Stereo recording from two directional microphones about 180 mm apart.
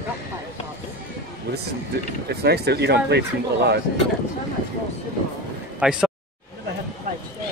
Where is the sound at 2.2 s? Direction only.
65° right (ahead or behind).